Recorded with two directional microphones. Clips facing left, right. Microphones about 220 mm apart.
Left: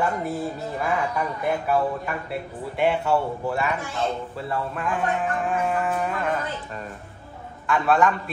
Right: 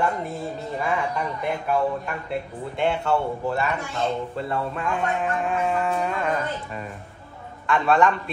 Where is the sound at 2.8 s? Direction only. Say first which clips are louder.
Left 1 dB; 5° left (ahead or behind).